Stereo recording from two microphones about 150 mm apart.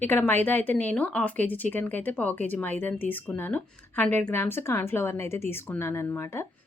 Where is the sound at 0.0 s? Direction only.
15° left (ahead or behind).